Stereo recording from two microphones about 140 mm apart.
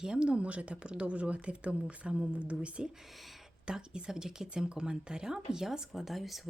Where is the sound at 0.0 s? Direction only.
5° right (ahead or behind).